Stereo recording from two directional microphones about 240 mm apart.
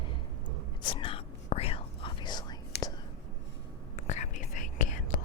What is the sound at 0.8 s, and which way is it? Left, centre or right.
Whispering, centre.